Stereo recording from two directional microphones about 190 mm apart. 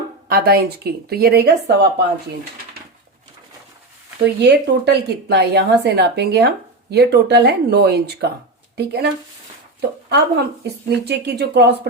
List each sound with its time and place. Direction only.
0.3 s a woman's voice: 55° right (ahead or behind)
4.4 s a woman's voice: 60° right (ahead or behind)
10.1 s a woman's voice: 60° right (ahead or behind)